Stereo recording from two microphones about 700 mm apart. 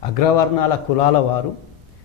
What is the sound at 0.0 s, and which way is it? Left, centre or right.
A man's voice, left.